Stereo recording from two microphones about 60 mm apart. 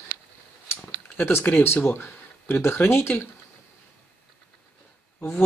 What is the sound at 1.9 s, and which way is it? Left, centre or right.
Speech, left.